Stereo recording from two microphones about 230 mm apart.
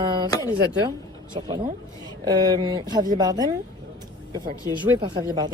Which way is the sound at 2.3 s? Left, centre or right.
Centre.